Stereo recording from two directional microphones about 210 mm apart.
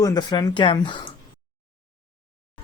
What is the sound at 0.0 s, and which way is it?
Speech, 20° left (ahead or behind).